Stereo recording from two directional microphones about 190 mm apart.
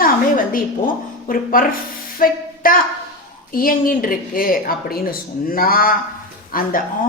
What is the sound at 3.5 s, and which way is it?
A woman's voice, 50° left (ahead or behind).